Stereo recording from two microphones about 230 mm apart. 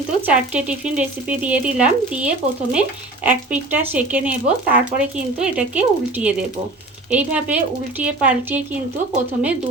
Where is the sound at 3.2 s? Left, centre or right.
Centre.